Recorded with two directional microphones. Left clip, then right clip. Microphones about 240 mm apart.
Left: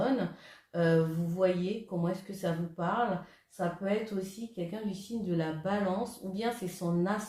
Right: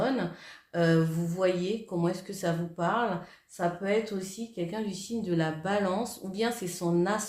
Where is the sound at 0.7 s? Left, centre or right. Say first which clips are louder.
Right 2 dB; right.